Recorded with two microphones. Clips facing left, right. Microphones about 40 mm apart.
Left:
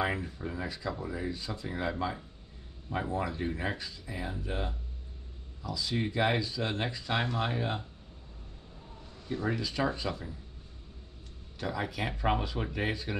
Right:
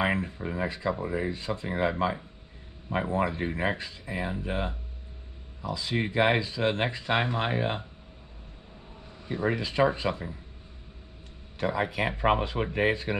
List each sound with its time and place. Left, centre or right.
0.0 s speech: right
9.2 s speech: right
11.5 s speech: right